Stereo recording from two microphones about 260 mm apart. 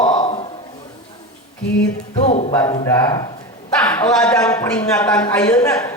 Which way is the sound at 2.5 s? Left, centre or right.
Centre.